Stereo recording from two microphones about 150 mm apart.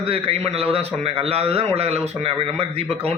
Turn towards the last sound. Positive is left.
turn(degrees=-40)  # may be behind; listen again after turning